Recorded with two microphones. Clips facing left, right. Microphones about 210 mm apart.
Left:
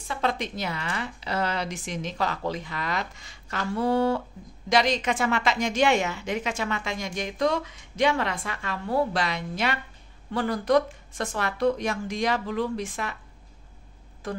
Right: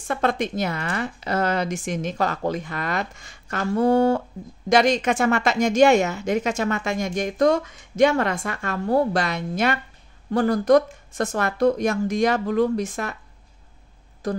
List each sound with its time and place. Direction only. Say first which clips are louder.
0.1 s a woman's voice: right 5 dB; 50° right (ahead or behind)
14.2 s speech: right 6 dB; 40° right (ahead or behind)